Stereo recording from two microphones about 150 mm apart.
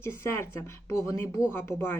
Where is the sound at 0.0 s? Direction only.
15° left (ahead or behind).